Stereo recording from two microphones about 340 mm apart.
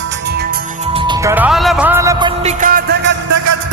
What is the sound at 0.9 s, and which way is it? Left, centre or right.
Speech, centre.